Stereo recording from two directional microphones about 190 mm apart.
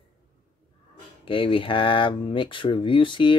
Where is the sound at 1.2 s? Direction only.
30° left (ahead or behind).